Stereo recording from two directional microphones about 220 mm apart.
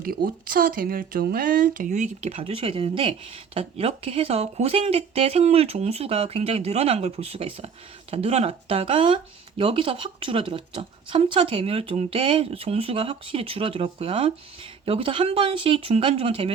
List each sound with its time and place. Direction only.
0.4 s speech: 40° right (ahead or behind); by 16.5 s 25° right (ahead or behind)